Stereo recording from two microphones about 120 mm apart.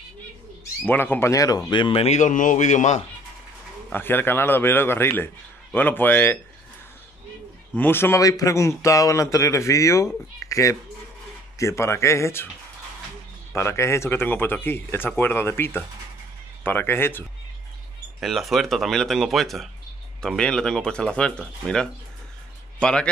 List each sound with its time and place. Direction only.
0.8 s speech: 15° left (ahead or behind)
1.3 s speech: 30° left (ahead or behind)
1.7 s speech: 45° left (ahead or behind)
2.1 s speech: 90° left
3.9 s speech: 15° left (ahead or behind)
7.7 s speech: 15° left (ahead or behind)
13.5 s speech: 20° left (ahead or behind)
18.2 s a man's voice: centre (ahead or behind)